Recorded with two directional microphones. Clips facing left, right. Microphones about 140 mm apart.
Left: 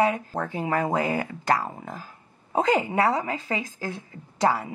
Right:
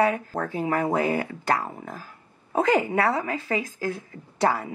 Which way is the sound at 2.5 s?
20° left (ahead or behind).